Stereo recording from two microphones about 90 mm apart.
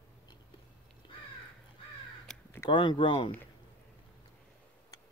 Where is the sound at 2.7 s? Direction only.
60° left (ahead or behind).